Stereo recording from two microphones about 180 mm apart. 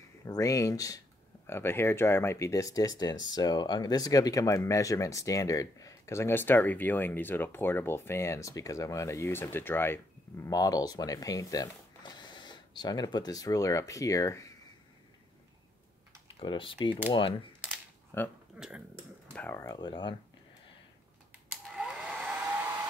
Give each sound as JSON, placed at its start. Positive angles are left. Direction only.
{"t": 0.3, "sound": "speech", "side_deg": 20}
{"t": 16.3, "sound": "speech", "side_deg": 30}
{"t": 18.1, "sound": "speech", "side_deg": 15}
{"t": 18.6, "sound": "speech", "side_deg": -10}
{"t": 19.3, "sound": "speech", "side_deg": 10}
{"t": 21.7, "sound": "hair dryer", "side_deg": -5}